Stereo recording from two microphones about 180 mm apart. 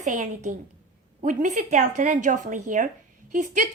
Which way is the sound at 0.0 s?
40° right (ahead or behind).